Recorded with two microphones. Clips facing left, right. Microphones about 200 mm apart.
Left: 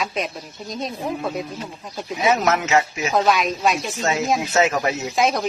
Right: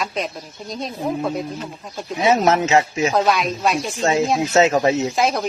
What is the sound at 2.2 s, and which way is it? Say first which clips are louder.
Speech: right 3 dB; 30° right (ahead or behind).